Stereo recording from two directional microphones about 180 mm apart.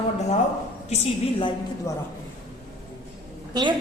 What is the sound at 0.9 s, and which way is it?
Speech, 35° left (ahead or behind).